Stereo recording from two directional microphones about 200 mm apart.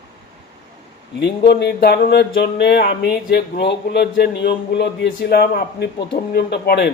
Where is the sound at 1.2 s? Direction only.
55° left (ahead or behind).